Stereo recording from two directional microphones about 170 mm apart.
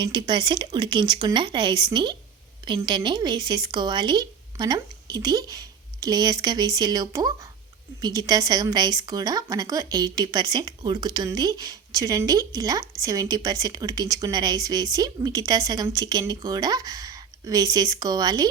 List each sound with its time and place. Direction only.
0.0 s speech: 25° right (ahead or behind)